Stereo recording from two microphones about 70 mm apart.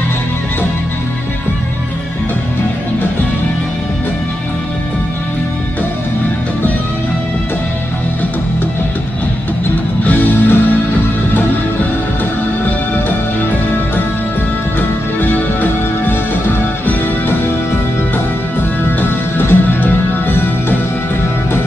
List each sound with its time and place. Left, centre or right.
10.0 s music: left
14.8 s music: left
18.9 s music: left